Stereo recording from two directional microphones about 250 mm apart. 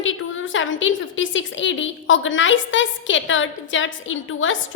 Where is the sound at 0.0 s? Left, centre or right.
Left.